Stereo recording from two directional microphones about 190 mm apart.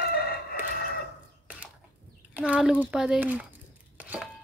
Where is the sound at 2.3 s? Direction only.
5° right (ahead or behind).